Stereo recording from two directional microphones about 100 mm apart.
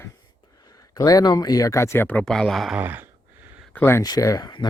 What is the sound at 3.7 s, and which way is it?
Speech, 25° left (ahead or behind).